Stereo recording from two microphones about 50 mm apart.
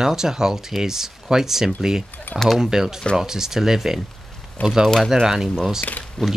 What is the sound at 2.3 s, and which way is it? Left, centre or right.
Chainsaw, left.